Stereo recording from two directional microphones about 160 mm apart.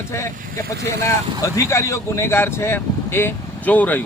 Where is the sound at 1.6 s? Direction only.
20° left (ahead or behind).